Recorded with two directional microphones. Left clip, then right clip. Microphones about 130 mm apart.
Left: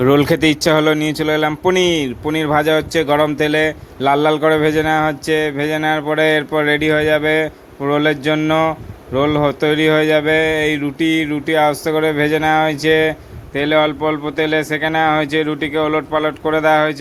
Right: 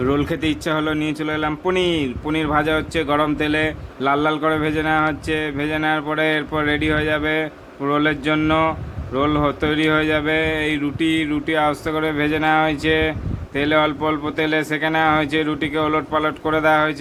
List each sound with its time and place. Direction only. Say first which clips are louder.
0.0 s speech: left 8 dB; 50° left (ahead or behind); by 16.9 s 30° left (ahead or behind)